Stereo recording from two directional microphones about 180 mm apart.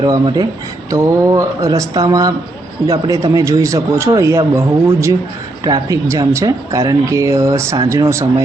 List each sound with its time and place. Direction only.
0.0 s speech: 20° right (ahead or behind)